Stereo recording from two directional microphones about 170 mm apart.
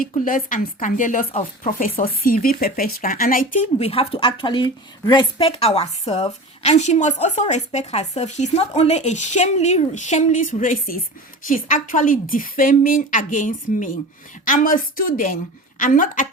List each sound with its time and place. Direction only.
0.3 s a woman's voice: 55° left (ahead or behind)